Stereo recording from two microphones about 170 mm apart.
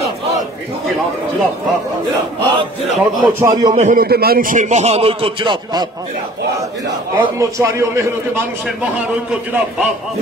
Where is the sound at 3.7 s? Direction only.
50° right (ahead or behind); by 5.8 s 30° right (ahead or behind).